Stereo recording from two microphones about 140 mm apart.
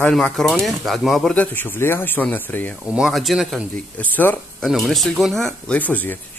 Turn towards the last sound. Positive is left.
turn(degrees=10)  # may be behind; listen again after turning